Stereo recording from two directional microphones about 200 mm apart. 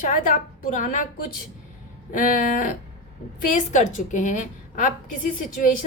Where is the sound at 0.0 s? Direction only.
40° left (ahead or behind).